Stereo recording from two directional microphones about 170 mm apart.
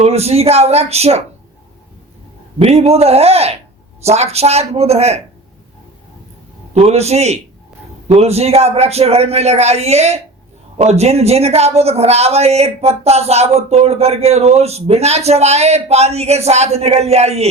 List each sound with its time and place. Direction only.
0.0 s speech: 40° right (ahead or behind)
2.6 s speech: 40° right (ahead or behind)
6.7 s speech: 40° right (ahead or behind)